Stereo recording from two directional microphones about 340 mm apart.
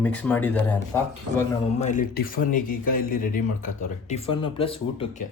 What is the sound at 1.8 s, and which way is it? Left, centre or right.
Speech, left.